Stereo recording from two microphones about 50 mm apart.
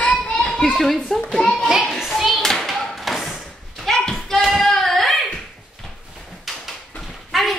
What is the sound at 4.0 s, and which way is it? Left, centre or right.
Hands, centre.